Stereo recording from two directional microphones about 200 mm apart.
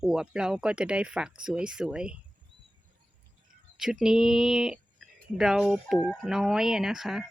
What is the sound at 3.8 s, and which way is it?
Speech, centre (ahead or behind).